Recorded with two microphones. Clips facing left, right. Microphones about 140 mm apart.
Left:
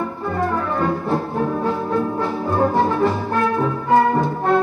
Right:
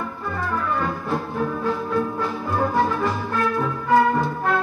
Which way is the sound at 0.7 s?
30° left (ahead or behind).